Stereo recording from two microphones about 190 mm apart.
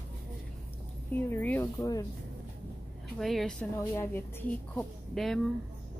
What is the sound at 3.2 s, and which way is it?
Speech, centre (ahead or behind).